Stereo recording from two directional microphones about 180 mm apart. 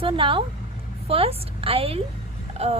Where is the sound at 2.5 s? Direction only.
35° right (ahead or behind).